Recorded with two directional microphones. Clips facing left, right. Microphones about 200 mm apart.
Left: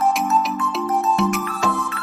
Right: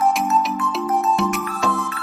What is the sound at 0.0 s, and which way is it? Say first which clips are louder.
Music: even; centre (ahead or behind).